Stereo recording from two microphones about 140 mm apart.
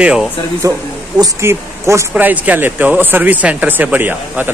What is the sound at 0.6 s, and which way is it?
Speech, 20° right (ahead or behind).